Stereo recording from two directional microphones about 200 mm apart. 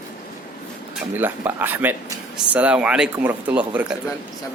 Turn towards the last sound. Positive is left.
turn(degrees=-10)  # may be behind; listen again after turning